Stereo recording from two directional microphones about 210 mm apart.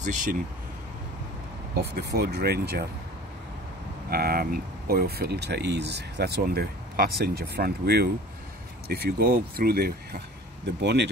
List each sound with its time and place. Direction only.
0.0 s speech: 35° right (ahead or behind)
1.8 s speech: 50° right (ahead or behind)
4.1 s speech: 45° right (ahead or behind)